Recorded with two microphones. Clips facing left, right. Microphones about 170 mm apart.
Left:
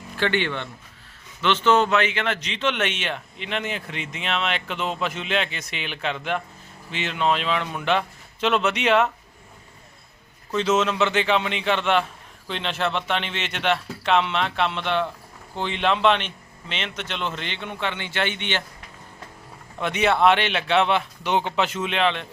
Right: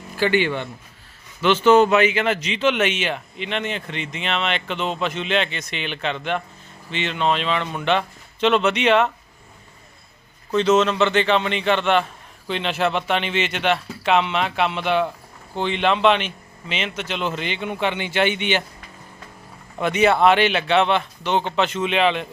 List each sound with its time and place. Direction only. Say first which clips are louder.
0.2 s a man's voice: right 4 dB; 10° right (ahead or behind)
10.5 s a man's voice: right 4 dB; 5° left (ahead or behind); by 18.6 s 10° right (ahead or behind)
19.8 s a man's voice: right 3 dB; centre (ahead or behind)